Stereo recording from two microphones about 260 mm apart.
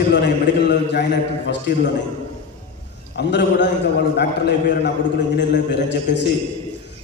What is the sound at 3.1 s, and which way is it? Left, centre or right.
A man's voice, left.